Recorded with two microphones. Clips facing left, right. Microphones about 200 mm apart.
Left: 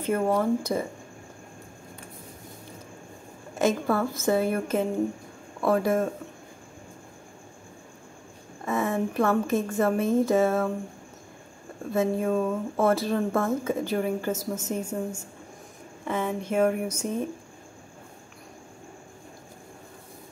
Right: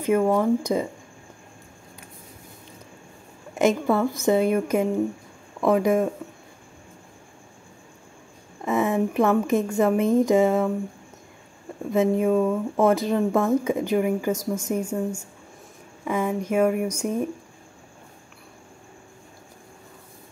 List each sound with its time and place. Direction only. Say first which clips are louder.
0.0 s speech: right 4 dB; 10° right (ahead or behind)
3.5 s speech: right 4 dB; 15° right (ahead or behind)
8.6 s speech: right 4 dB; 20° right (ahead or behind)
11.9 s speech: right 4 dB; 15° right (ahead or behind)